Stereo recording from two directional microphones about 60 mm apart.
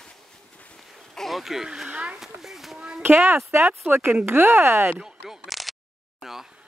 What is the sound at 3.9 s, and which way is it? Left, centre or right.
Speech, right.